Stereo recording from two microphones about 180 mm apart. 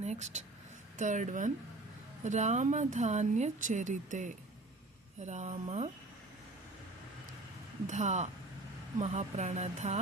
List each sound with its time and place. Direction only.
0.0 s speech: 40° right (ahead or behind)
7.9 s speech: 40° right (ahead or behind)